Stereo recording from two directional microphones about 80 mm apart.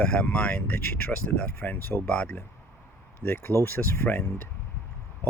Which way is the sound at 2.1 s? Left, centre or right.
Centre.